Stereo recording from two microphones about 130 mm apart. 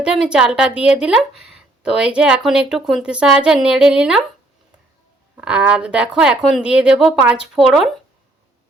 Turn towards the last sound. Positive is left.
turn(degrees=-5)  # may be behind; listen again after turning